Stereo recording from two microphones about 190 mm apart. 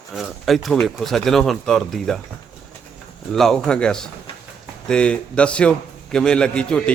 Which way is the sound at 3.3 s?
Centre (ahead or behind).